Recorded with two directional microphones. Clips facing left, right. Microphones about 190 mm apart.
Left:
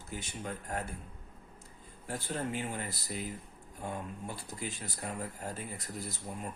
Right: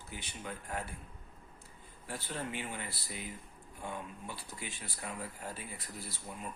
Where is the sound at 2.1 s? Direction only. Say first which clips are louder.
Left 4 dB; 45° left (ahead or behind).